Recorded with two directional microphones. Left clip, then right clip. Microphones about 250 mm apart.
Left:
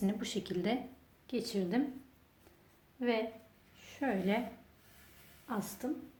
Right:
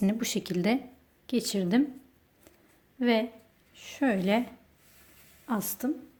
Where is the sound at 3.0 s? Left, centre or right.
Right.